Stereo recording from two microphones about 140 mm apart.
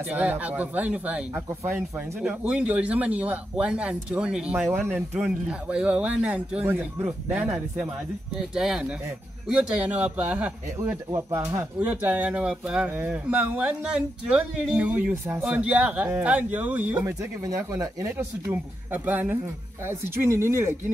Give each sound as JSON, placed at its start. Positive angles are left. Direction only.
{"t": 0.1, "sound": "speech", "side_deg": -10}
{"t": 11.1, "sound": "speech", "side_deg": -20}